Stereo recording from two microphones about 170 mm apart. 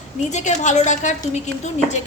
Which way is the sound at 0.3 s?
45° left (ahead or behind).